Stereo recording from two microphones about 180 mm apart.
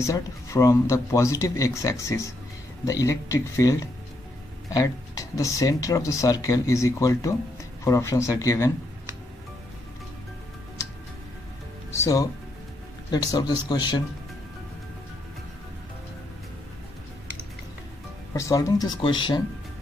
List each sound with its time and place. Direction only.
0.0 s speech: 15° left (ahead or behind)
11.9 s speech: 15° left (ahead or behind)
18.3 s speech: 15° left (ahead or behind)